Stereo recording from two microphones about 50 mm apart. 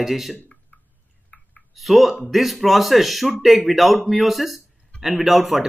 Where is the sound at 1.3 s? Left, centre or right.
Left.